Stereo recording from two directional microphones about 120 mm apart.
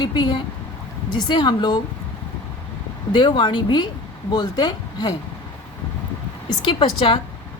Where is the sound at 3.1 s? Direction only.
40° left (ahead or behind).